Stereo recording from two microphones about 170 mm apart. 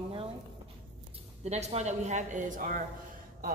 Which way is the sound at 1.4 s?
40° right (ahead or behind).